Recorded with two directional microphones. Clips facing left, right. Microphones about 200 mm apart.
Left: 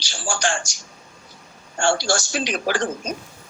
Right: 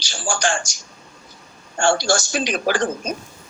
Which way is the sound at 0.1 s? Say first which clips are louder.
Right 2 dB; 45° right (ahead or behind).